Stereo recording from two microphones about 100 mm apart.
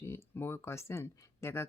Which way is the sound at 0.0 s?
25° left (ahead or behind).